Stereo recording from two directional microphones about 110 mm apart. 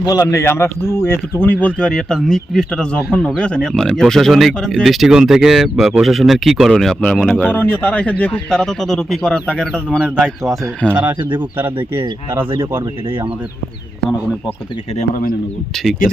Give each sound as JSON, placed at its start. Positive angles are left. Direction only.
{"t": 0.0, "sound": "speech", "side_deg": 30}
{"t": 1.6, "sound": "speech", "side_deg": 10}
{"t": 10.8, "sound": "speech", "side_deg": -15}